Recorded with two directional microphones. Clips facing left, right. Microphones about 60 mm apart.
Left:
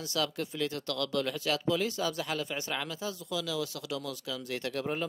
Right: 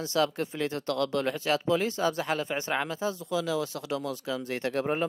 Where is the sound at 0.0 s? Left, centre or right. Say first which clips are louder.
Right 6 dB; right.